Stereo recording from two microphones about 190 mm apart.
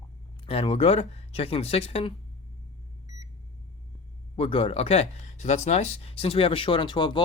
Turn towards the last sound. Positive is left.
turn(degrees=25)  # may be behind; listen again after turning